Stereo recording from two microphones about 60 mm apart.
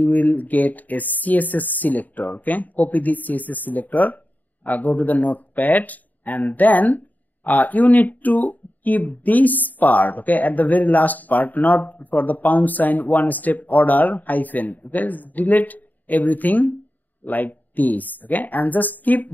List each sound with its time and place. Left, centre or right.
0.0 s speech: left